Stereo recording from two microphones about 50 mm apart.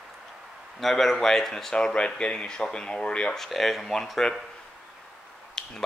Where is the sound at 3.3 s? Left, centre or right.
Centre.